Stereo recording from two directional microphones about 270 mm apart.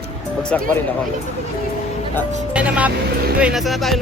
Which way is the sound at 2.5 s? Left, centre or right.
Centre.